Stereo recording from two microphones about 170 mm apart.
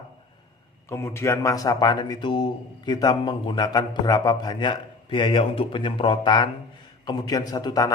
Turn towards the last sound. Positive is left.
turn(degrees=25)  # may be behind; listen again after turning